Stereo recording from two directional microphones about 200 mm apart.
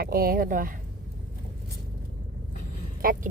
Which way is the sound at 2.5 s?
45° left (ahead or behind).